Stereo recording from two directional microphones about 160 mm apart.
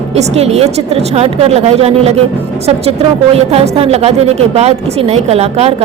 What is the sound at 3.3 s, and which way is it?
A woman's voice, 40° right (ahead or behind).